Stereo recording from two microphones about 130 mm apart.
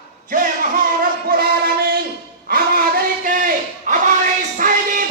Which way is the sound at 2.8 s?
90° right.